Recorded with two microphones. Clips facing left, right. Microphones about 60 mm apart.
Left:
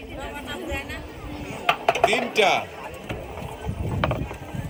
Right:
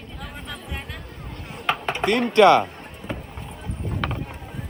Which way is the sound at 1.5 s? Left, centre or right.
Centre.